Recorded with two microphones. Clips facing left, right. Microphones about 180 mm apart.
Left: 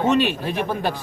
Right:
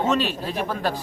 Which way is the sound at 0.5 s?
20° left (ahead or behind).